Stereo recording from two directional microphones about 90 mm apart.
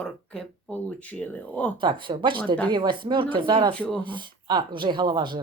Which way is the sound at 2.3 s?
15° left (ahead or behind).